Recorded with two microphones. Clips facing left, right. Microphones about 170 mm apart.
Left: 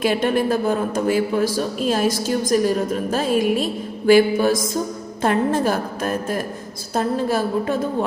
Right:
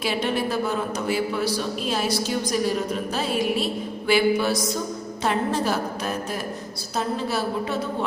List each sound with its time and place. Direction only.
0.0 s a man's voice: 50° left (ahead or behind)